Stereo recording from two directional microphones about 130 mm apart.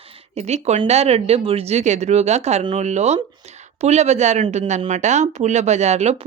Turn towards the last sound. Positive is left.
turn(degrees=-60)  # may be behind; listen again after turning